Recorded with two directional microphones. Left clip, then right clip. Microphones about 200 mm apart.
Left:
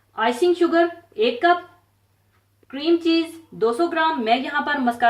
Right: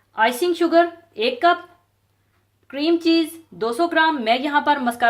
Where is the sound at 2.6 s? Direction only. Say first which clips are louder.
Right 1 dB; 45° right (ahead or behind).